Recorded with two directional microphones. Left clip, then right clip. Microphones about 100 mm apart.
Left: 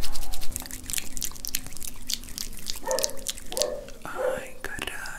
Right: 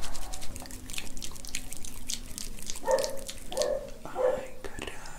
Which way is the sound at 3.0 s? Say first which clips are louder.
Left 2 dB; 25° left (ahead or behind).